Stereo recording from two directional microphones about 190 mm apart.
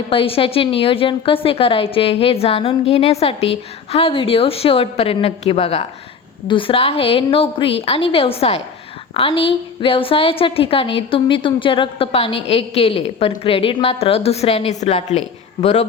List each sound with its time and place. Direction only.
0.1 s a woman's voice: 30° left (ahead or behind)